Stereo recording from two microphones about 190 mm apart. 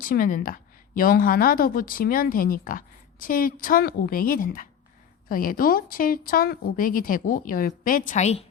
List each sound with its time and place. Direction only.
0.0 s a woman's voice: 50° left (ahead or behind)